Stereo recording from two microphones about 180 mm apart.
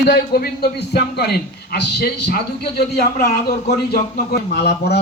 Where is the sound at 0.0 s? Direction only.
60° left (ahead or behind).